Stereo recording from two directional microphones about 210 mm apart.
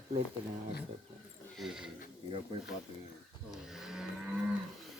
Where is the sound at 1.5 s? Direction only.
Centre (ahead or behind).